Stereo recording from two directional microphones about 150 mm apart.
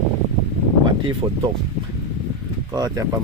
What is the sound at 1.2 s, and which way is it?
Speech, 25° right (ahead or behind).